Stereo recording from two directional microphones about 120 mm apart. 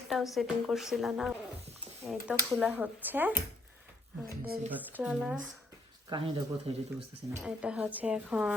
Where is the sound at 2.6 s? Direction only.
15° right (ahead or behind).